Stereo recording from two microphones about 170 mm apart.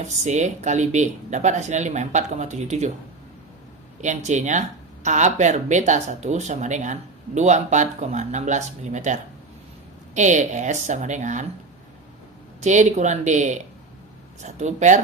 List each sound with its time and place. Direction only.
0.3 s speech: 45° right (ahead or behind)
4.0 s speech: 45° right (ahead or behind)
10.2 s speech: 45° right (ahead or behind)
12.5 s speech: 45° right (ahead or behind)